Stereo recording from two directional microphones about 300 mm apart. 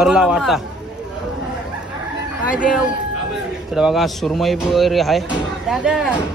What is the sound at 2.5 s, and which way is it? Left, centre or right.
Speech, centre.